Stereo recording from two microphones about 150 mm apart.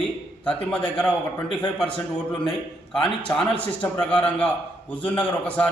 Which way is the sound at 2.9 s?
10° left (ahead or behind).